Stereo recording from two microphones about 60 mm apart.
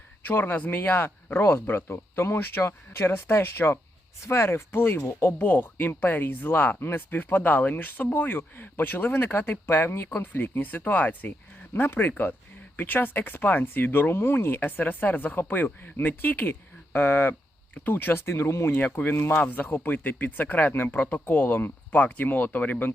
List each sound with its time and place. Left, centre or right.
0.3 s speech: left
1.9 s speech: left
10.2 s speech: left
19.1 s speech: left
19.4 s speech: left